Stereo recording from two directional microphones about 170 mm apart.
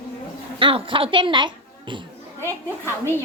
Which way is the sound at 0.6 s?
30° right (ahead or behind).